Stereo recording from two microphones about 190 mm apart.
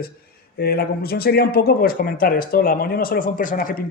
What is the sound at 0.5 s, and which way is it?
A man's voice, 55° left (ahead or behind).